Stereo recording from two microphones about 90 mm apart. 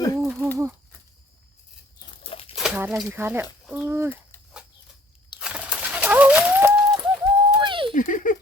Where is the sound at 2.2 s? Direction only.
90° left.